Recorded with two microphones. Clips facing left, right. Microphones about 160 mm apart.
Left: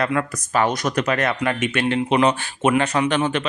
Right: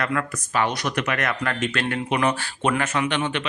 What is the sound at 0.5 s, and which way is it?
Speech, 45° left (ahead or behind).